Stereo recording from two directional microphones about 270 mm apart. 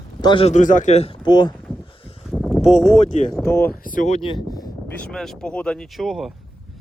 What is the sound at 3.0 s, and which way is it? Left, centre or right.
Speech, left.